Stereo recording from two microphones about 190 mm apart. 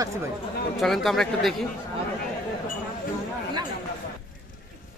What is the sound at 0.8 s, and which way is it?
Speech, centre (ahead or behind).